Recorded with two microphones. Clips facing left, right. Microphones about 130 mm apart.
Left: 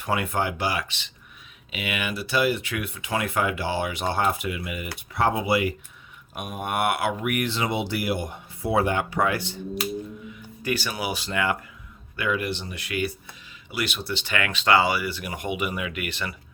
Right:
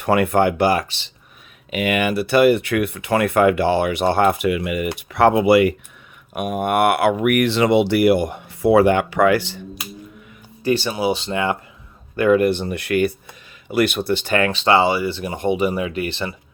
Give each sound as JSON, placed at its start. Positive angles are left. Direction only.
{"t": 0.0, "sound": "speech", "side_deg": -65}
{"t": 0.9, "sound": "speech", "side_deg": -35}
{"t": 1.7, "sound": "speech", "side_deg": -50}
{"t": 10.6, "sound": "speech", "side_deg": -30}
{"t": 12.1, "sound": "speech", "side_deg": -45}
{"t": 14.3, "sound": "speech", "side_deg": -30}